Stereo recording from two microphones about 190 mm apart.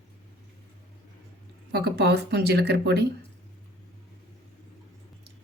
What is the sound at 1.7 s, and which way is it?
Speech, 60° right (ahead or behind).